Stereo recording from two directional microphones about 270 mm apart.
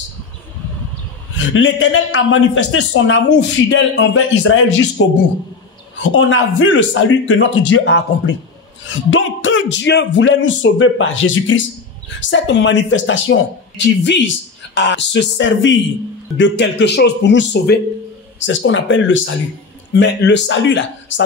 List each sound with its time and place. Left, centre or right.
1.5 s speech: left